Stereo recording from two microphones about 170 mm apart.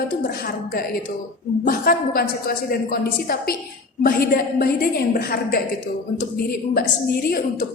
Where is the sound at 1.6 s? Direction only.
60° left (ahead or behind).